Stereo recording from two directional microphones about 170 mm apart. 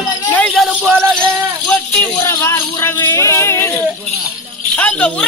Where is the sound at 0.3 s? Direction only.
5° left (ahead or behind).